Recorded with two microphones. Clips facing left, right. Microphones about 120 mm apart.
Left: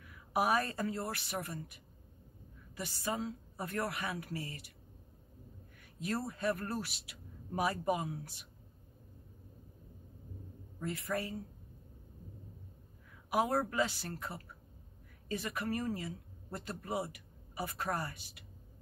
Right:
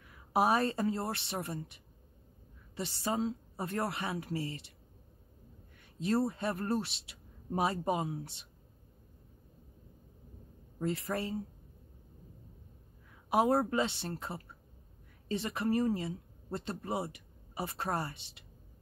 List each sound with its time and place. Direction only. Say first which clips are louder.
0.0 s speech: right 4 dB; 30° right (ahead or behind)
5.9 s speech: right 7 dB; 30° right (ahead or behind)
10.8 s speech: right 3 dB; 30° right (ahead or behind)
13.3 s speech: right 4 dB; 25° right (ahead or behind)